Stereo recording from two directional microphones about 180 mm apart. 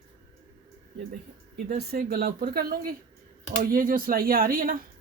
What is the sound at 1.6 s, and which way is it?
Speech, 55° right (ahead or behind).